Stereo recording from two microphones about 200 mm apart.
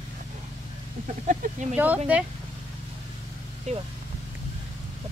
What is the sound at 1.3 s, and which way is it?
Speech, 40° right (ahead or behind).